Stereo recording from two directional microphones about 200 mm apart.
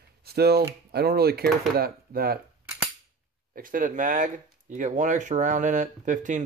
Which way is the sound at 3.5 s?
45° right (ahead or behind).